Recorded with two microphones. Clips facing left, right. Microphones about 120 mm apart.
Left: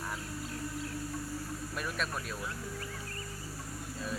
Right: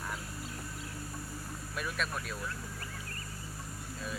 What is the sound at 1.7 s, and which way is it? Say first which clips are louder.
Speech: right 1 dB; centre (ahead or behind).